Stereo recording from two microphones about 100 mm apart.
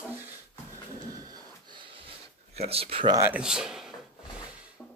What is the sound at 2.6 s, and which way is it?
Speech, 85° right.